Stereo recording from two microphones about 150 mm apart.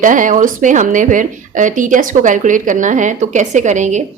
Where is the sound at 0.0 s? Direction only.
60° right (ahead or behind).